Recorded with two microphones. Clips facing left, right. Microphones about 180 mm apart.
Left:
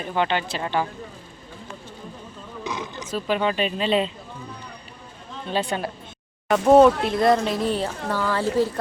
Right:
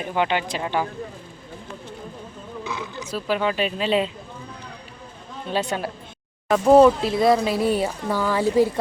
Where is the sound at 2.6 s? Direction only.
20° left (ahead or behind).